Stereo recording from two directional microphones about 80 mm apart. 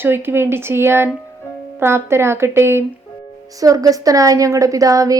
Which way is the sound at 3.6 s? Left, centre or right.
Right.